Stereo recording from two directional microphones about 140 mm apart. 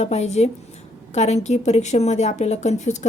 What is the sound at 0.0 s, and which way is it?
A woman's voice, 55° left (ahead or behind).